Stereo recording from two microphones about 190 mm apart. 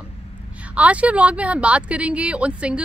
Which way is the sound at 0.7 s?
5° right (ahead or behind).